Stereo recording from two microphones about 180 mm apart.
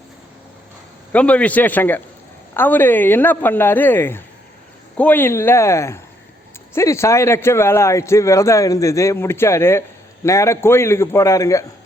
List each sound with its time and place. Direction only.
1.1 s speech: 5° left (ahead or behind)